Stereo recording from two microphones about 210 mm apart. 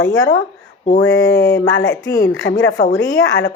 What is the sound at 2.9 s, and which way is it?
Speech, 65° left (ahead or behind).